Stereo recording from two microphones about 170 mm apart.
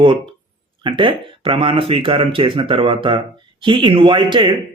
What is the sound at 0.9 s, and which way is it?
Speech, 30° right (ahead or behind).